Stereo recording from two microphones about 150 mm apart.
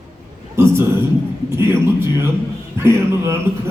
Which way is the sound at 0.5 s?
15° right (ahead or behind).